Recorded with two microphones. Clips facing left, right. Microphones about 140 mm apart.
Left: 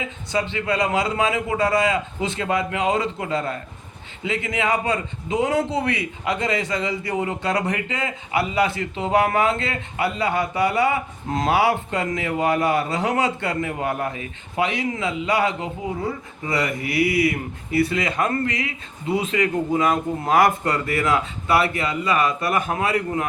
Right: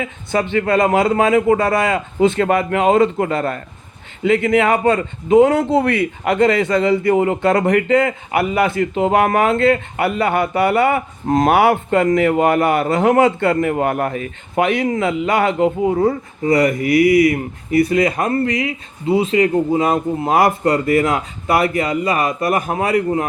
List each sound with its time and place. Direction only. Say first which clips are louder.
0.0 s a man's voice: right 5 dB; 55° right (ahead or behind)
16.4 s speech: right 10 dB; 45° right (ahead or behind)
16.8 s speech: right 8 dB; 30° left (ahead or behind)
17.7 s speech: right 6 dB; 40° right (ahead or behind)